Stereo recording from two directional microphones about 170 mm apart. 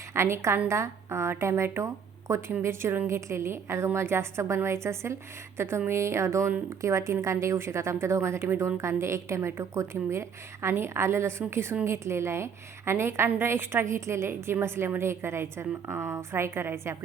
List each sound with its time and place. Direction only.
0.1 s a woman's voice: 15° right (ahead or behind)